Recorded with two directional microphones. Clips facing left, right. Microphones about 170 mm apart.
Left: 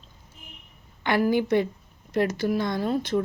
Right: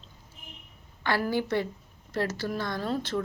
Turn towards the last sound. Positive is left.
turn(degrees=15)  # may be behind; listen again after turning